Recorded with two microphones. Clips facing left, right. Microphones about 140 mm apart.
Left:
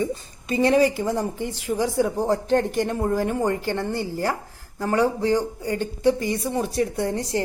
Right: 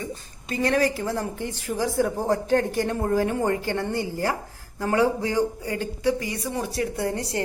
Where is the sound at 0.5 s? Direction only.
25° left (ahead or behind).